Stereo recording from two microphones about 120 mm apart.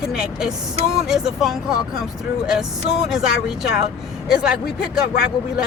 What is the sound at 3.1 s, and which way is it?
Speech, 5° right (ahead or behind).